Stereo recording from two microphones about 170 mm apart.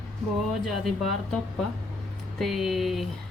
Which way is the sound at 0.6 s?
Centre (ahead or behind).